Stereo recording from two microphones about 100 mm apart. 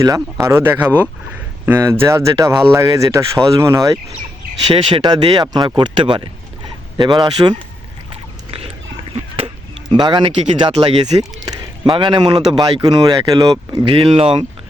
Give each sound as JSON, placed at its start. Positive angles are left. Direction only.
{"t": 0.0, "sound": "speech", "side_deg": -35}
{"t": 4.7, "sound": "speech", "side_deg": -65}
{"t": 5.1, "sound": "speech", "side_deg": -45}
{"t": 8.1, "sound": "a sound", "side_deg": -70}
{"t": 10.0, "sound": "speech", "side_deg": -55}
{"t": 13.8, "sound": "speech", "side_deg": -55}
{"t": 14.1, "sound": "speech", "side_deg": -75}